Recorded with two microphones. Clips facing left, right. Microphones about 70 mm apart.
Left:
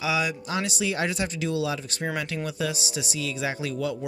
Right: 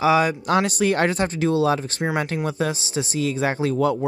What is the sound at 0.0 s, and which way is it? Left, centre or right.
Speech, right.